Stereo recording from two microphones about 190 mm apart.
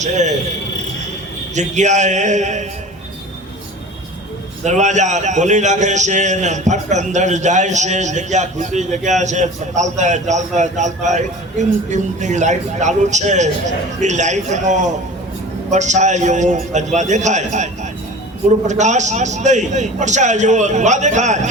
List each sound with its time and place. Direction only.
0.0 s a man's voice: 40° right (ahead or behind)
1.5 s a man's voice: 40° right (ahead or behind)
4.6 s a man's voice: 40° right (ahead or behind)
18.7 s a man's voice: 40° right (ahead or behind)